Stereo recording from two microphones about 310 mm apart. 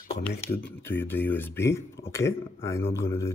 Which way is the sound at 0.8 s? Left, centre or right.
Centre.